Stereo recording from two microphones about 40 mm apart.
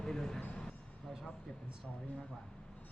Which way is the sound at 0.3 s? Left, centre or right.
Left.